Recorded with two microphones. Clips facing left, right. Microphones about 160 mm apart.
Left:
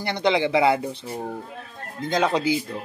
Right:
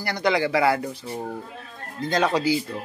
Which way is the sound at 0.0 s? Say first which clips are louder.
Left 1 dB; 20° left (ahead or behind).